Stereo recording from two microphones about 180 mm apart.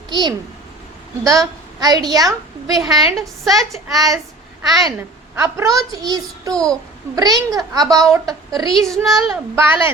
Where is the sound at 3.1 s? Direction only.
Centre (ahead or behind).